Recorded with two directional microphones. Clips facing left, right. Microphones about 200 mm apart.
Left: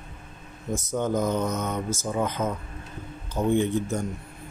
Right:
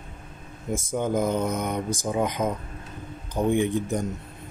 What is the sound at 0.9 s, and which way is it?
Speech, 10° right (ahead or behind).